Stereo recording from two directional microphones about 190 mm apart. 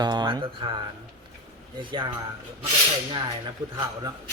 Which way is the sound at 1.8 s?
25° right (ahead or behind).